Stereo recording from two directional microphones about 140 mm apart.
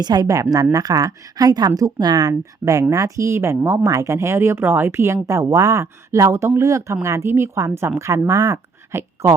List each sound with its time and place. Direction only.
0.0 s speech: 30° right (ahead or behind)